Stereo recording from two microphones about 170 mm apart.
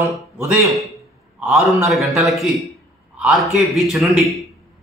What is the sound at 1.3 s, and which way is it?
A man's voice, 5° right (ahead or behind).